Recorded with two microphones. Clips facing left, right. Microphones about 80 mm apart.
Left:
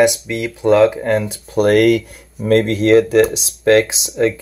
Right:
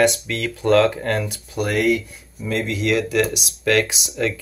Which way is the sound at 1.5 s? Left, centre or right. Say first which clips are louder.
Left 8 dB; left.